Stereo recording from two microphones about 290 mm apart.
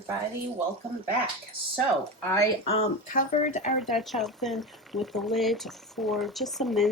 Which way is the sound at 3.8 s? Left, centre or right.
Centre.